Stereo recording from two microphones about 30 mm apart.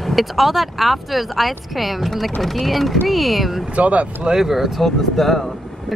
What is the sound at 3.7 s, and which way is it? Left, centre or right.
Speech, right.